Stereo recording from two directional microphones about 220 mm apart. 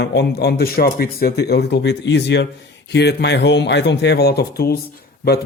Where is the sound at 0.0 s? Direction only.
50° left (ahead or behind).